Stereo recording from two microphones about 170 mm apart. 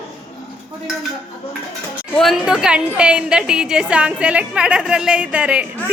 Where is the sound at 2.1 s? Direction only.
Centre (ahead or behind).